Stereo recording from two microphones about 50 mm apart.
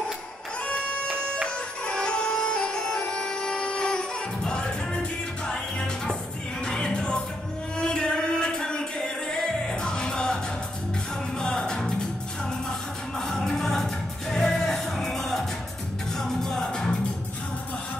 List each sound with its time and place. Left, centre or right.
1.1 s music: centre
13.2 s music: centre